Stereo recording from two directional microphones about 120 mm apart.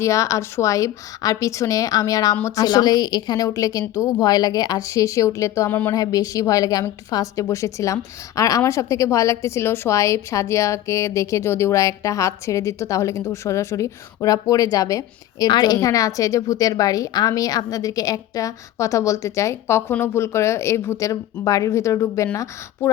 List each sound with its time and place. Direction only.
0.0 s a woman's voice: 25° left (ahead or behind)
5.9 s a woman's voice: 30° left (ahead or behind)